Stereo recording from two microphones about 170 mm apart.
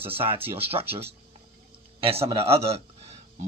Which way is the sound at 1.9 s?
35° right (ahead or behind).